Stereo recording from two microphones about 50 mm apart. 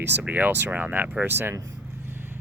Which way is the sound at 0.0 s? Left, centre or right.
Right.